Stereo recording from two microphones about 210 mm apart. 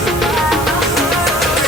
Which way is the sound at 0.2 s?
Centre (ahead or behind).